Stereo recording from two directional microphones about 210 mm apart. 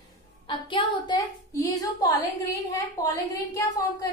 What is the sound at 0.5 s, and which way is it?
A child's voice, 20° left (ahead or behind).